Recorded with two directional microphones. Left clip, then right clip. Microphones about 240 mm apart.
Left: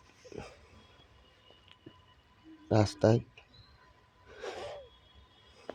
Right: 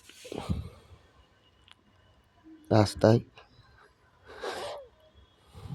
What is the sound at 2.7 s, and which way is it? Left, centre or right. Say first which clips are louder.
Speech: right 4 dB; right.